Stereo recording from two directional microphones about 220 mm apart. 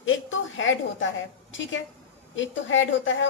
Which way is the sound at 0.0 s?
60° left (ahead or behind).